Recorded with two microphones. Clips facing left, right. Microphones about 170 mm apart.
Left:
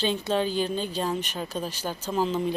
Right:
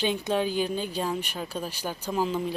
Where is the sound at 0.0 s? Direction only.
15° right (ahead or behind).